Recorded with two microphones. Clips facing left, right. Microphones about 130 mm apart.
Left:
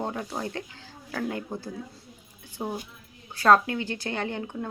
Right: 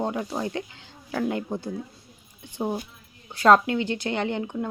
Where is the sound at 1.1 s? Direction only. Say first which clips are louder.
Right 4 dB; 30° right (ahead or behind).